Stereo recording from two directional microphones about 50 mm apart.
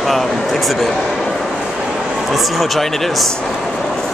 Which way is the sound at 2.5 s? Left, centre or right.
Centre.